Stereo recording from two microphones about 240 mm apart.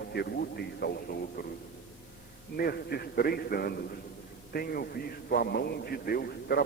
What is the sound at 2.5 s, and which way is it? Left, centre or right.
A man's voice, left.